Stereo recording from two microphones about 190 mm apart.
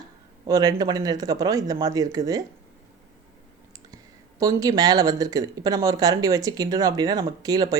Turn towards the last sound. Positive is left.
turn(degrees=-20)  # may be behind; listen again after turning